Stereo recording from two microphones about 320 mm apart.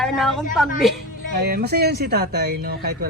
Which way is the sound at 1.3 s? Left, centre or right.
Right.